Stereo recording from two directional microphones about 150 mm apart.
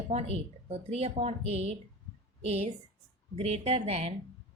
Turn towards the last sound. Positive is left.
turn(degrees=-45)  # may be behind; listen again after turning